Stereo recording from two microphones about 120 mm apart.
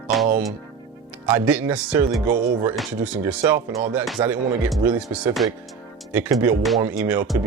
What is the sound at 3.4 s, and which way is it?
Speech, 25° right (ahead or behind).